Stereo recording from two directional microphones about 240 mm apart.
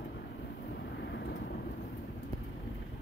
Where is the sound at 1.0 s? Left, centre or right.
Left.